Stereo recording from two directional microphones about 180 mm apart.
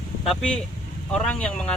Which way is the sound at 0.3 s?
5° left (ahead or behind).